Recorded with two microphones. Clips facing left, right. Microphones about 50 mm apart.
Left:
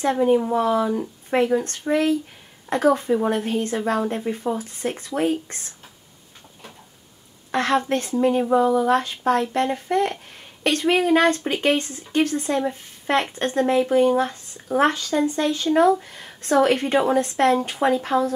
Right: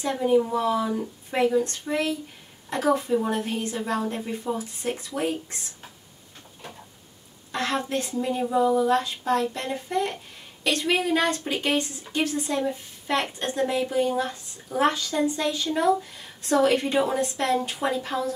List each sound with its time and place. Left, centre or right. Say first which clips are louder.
0.0 s speech: left 3 dB; left
7.5 s speech: left 6 dB; left